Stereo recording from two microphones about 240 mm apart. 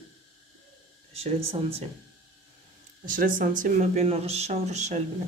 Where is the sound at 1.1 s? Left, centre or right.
Right.